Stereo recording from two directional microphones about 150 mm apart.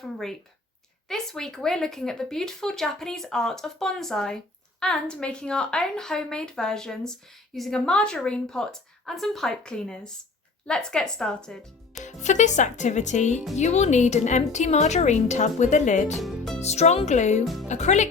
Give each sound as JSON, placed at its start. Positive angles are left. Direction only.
{"t": 0.0, "sound": "speech", "side_deg": 0}
{"t": 12.0, "sound": "a woman's voice", "side_deg": 50}
{"t": 16.1, "sound": "music", "side_deg": 0}
{"t": 16.6, "sound": "a woman's voice", "side_deg": 45}
{"t": 17.4, "sound": "speech", "side_deg": 0}
{"t": 17.7, "sound": "a woman's voice", "side_deg": 50}